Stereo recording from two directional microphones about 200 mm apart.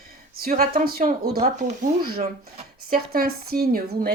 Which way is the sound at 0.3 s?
45° right (ahead or behind).